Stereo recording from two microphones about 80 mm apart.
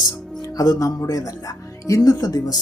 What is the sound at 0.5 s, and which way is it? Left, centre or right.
Speech, left.